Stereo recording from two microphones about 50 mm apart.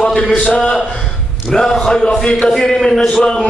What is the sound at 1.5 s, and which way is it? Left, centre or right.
A man's voice, centre.